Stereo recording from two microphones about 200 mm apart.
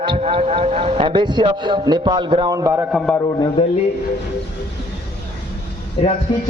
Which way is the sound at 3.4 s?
25° left (ahead or behind).